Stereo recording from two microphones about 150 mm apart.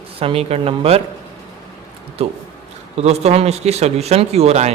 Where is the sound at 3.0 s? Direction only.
45° right (ahead or behind).